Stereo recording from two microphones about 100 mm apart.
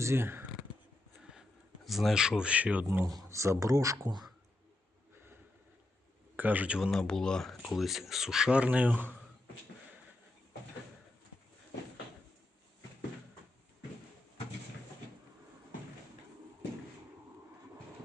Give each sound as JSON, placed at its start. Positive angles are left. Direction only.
{"t": 0.0, "sound": "speech", "side_deg": -25}
{"t": 1.2, "sound": "a sound", "side_deg": -5}
{"t": 2.8, "sound": "speech", "side_deg": -30}
{"t": 6.3, "sound": "speech", "side_deg": -20}
{"t": 6.9, "sound": "speech", "side_deg": 5}